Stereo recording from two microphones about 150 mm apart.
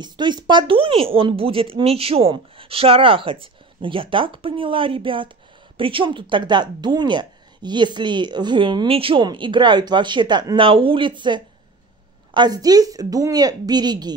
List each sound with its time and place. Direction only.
0.0 s a woman's voice: 30° right (ahead or behind)